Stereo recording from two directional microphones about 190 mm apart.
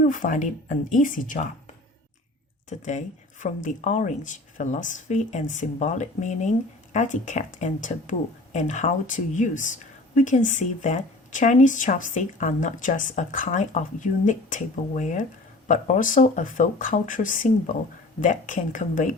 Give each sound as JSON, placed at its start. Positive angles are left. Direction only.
{"t": 0.0, "sound": "speech", "side_deg": 45}
{"t": 2.6, "sound": "speech", "side_deg": 40}